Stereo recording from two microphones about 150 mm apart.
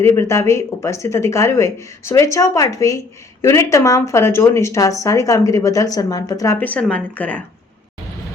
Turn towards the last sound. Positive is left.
turn(degrees=10)  # may be behind; listen again after turning